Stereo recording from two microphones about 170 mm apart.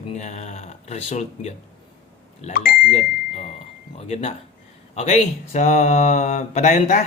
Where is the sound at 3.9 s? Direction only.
35° left (ahead or behind).